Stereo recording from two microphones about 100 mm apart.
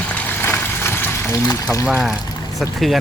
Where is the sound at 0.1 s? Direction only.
20° left (ahead or behind).